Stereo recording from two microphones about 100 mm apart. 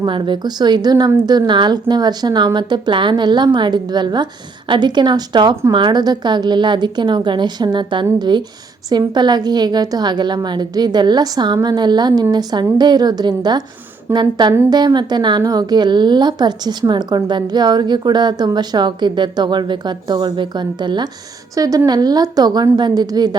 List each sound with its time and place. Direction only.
0.0 s a woman's voice: 50° right (ahead or behind)
21.5 s a woman's voice: 40° right (ahead or behind)